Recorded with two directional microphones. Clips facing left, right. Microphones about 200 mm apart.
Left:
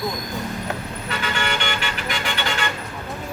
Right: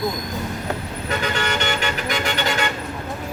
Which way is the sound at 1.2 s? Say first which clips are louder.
Right 1 dB; 40° right (ahead or behind).